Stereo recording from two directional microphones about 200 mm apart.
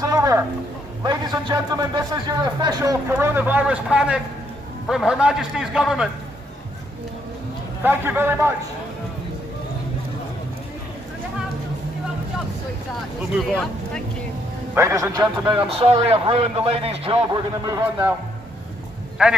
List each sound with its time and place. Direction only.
0.0 s a sound: 15° right (ahead or behind)
1.0 s a man's voice: 20° right (ahead or behind); by 6.0 s 5° right (ahead or behind)
7.8 s a man's voice: 10° right (ahead or behind)
14.7 s a man's voice: 15° right (ahead or behind)
17.6 s a man's voice: 10° right (ahead or behind)
19.2 s a man's voice: 5° right (ahead or behind)